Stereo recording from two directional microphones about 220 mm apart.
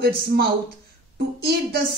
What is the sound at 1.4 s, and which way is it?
Speech, 45° right (ahead or behind).